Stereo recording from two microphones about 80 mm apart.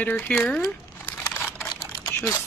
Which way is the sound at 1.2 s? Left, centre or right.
Left.